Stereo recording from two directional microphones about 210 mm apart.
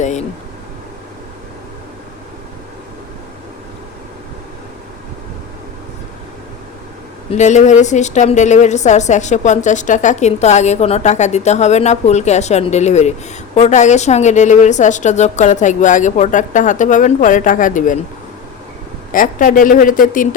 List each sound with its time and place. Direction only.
0.0 s a sound: 35° left (ahead or behind)
7.3 s a woman's voice: 35° left (ahead or behind)
19.1 s a woman's voice: 40° left (ahead or behind)